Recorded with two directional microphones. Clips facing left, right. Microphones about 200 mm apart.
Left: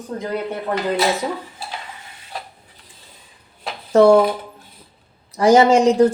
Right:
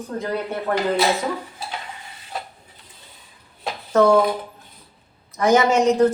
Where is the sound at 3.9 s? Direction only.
30° left (ahead or behind).